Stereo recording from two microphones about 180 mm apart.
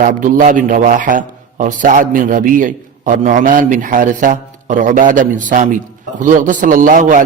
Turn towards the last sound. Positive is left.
turn(degrees=-50)  # may be behind; listen again after turning